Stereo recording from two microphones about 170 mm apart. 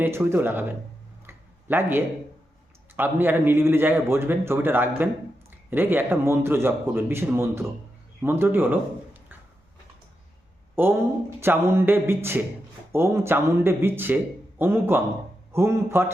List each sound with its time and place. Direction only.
0.0 s a man's voice: 15° right (ahead or behind)
1.3 s a sound: 10° right (ahead or behind)
2.9 s a man's voice: 15° right (ahead or behind)
10.8 s a man's voice: 10° right (ahead or behind)